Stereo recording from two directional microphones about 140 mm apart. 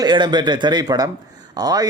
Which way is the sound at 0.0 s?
30° right (ahead or behind).